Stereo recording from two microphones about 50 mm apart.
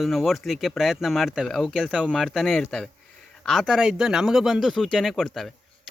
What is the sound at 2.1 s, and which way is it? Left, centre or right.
Speech, centre.